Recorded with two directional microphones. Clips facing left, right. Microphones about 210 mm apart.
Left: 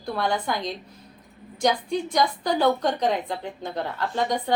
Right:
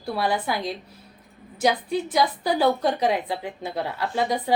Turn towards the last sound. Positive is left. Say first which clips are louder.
# right 1 dB
turn(degrees=-10)  # may be behind; listen again after turning